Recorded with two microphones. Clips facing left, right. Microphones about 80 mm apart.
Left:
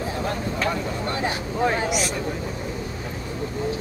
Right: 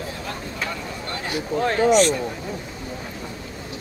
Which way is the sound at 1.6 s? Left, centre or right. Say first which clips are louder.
Right 6 dB; centre.